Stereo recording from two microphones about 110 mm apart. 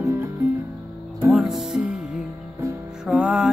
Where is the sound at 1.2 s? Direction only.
5° right (ahead or behind).